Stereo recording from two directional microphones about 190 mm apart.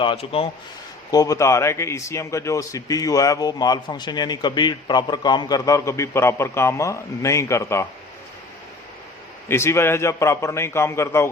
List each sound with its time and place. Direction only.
0.0 s speech: 30° left (ahead or behind)
1.1 s a man's voice: 20° left (ahead or behind)
9.5 s a man's voice: 15° left (ahead or behind)